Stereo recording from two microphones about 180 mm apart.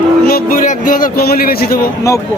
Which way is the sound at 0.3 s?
55° left (ahead or behind).